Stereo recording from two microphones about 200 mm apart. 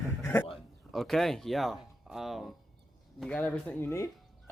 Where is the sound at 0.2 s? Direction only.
10° left (ahead or behind).